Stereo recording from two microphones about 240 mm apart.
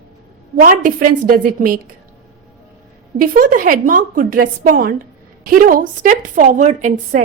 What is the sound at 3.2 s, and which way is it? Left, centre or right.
A woman's voice, right.